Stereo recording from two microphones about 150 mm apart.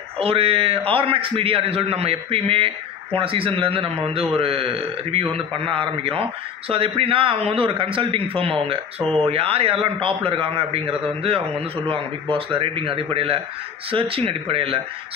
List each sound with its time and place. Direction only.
0.2 s a man's voice: 40° right (ahead or behind)